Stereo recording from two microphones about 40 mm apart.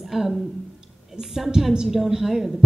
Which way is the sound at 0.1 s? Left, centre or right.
Centre.